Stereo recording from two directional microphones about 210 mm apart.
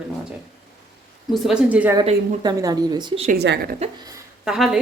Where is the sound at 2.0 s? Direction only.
20° right (ahead or behind).